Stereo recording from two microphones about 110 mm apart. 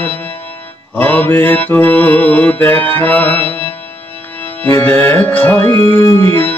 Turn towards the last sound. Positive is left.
turn(degrees=20)  # may be behind; listen again after turning